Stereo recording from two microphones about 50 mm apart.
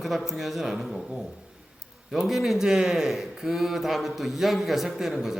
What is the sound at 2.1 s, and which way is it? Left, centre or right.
Speech, centre.